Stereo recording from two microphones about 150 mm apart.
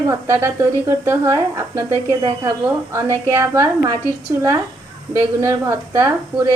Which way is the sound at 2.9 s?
20° right (ahead or behind).